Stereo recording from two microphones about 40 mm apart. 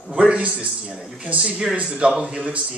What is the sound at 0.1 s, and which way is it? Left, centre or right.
Speech, right.